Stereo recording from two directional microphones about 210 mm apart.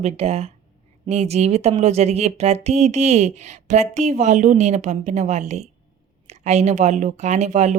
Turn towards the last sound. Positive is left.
turn(degrees=-35)  # may be behind; listen again after turning